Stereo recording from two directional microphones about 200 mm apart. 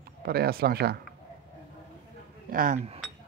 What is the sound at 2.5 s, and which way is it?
Speech, 45° right (ahead or behind).